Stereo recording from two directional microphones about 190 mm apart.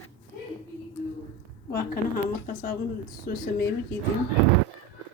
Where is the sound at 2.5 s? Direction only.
45° left (ahead or behind).